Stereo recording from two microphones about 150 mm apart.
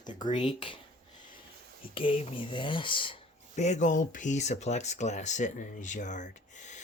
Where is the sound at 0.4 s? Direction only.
35° left (ahead or behind).